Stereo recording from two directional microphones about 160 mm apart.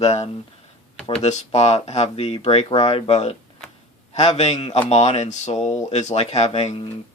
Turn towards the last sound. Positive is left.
turn(degrees=35)  # may be behind; listen again after turning